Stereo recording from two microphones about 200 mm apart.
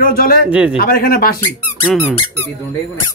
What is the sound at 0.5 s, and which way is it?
Speech, 5° right (ahead or behind).